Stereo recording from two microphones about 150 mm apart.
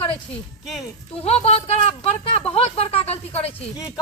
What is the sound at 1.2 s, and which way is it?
Speech, 45° left (ahead or behind).